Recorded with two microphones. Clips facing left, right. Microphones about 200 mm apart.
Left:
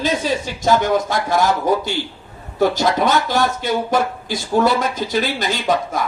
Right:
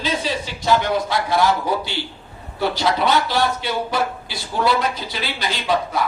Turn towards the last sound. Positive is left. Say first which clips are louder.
# left 1 dB
turn(degrees=45)  # may be behind; listen again after turning